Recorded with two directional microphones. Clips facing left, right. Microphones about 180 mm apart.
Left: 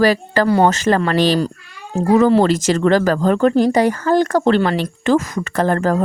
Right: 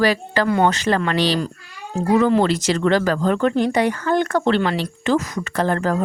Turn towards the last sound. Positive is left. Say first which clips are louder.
# left 3 dB
turn(degrees=45)  # may be behind; listen again after turning